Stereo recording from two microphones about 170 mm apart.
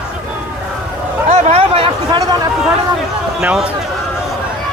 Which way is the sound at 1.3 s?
40° right (ahead or behind).